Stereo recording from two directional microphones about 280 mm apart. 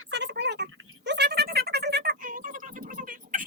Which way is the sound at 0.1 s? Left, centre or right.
Right.